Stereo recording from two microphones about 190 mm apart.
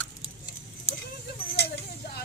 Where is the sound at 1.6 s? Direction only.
60° left (ahead or behind).